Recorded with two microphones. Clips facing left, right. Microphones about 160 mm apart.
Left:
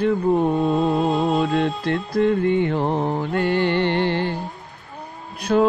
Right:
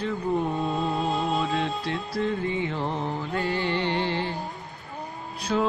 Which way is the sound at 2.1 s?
55° left (ahead or behind).